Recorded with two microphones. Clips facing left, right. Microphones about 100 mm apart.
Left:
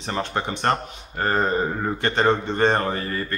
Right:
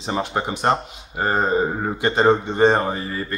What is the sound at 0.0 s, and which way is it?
Speech, 15° right (ahead or behind).